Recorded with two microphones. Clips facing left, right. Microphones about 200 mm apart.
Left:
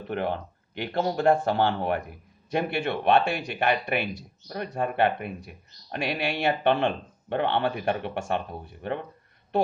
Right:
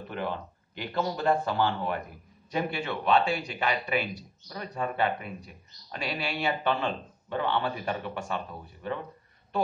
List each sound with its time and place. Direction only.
0.1 s speech: 65° left (ahead or behind)
1.4 s speech: 70° left (ahead or behind)